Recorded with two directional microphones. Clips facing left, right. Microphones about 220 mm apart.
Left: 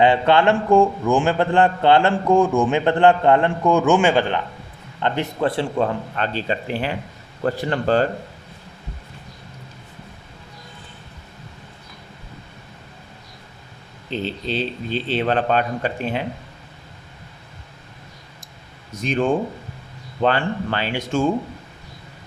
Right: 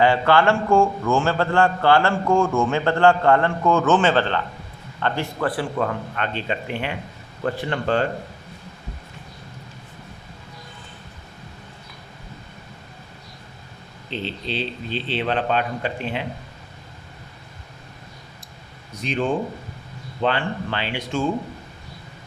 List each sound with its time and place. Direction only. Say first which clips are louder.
0.0 s a man's voice: left 2 dB; 20° left (ahead or behind); by 8.0 s 35° left (ahead or behind)
14.1 s a man's voice: left 3 dB; 45° left (ahead or behind)
18.9 s a man's voice: left 3 dB; 45° left (ahead or behind)